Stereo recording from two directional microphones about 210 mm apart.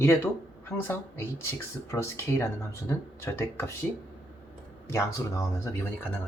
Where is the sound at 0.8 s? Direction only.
10° left (ahead or behind).